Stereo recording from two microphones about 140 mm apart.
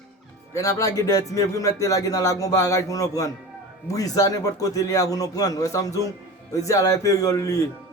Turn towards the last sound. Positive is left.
turn(degrees=25)  # may be behind; listen again after turning